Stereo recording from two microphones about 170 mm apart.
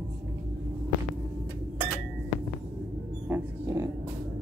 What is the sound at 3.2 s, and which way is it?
Music, 15° right (ahead or behind).